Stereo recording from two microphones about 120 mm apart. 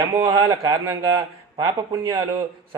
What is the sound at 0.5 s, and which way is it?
Speech, 35° right (ahead or behind).